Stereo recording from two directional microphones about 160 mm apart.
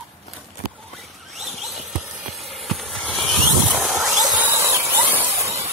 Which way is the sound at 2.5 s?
Centre (ahead or behind).